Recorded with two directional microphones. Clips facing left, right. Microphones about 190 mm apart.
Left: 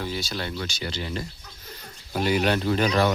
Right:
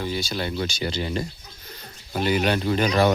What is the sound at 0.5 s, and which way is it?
Speech, 20° right (ahead or behind).